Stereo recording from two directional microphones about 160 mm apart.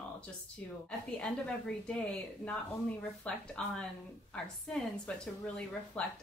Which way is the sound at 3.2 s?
5° left (ahead or behind).